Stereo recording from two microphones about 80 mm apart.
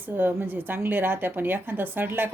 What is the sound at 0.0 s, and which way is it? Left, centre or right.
A woman's voice, right.